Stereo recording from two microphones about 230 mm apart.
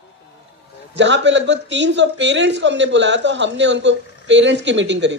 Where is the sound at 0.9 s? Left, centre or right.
Right.